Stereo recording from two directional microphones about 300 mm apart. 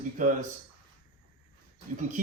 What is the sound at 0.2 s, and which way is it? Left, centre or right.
Speech, right.